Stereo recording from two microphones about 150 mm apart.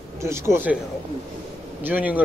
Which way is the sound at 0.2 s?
20° right (ahead or behind).